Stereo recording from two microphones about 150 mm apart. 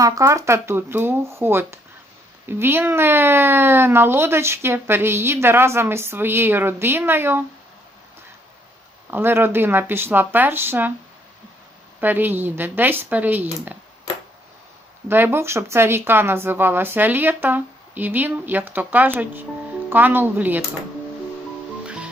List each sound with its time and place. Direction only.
0.0 s speech: 20° right (ahead or behind)
9.0 s speech: 15° right (ahead or behind)
11.9 s speech: 15° right (ahead or behind)
15.1 s speech: 15° right (ahead or behind)
21.8 s music: 5° right (ahead or behind)